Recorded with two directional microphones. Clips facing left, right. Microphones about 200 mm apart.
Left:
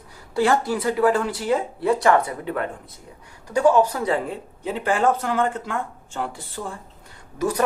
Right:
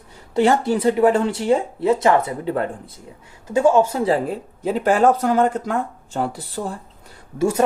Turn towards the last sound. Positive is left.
turn(degrees=-25)  # may be behind; listen again after turning